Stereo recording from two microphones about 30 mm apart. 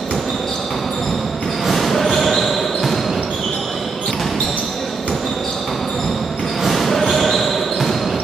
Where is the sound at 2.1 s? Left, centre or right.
Centre.